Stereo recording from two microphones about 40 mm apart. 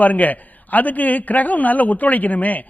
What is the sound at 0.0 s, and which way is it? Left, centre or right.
A man's voice, left.